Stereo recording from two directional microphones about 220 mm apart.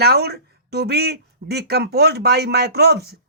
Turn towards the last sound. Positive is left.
turn(degrees=-45)  # may be behind; listen again after turning